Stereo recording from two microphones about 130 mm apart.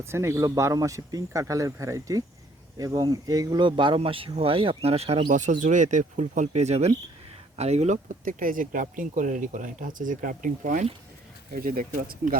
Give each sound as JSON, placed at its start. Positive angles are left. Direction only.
{"t": 0.0, "sound": "speech", "side_deg": -20}
{"t": 5.3, "sound": "speech", "side_deg": -75}
{"t": 11.5, "sound": "speech", "side_deg": -90}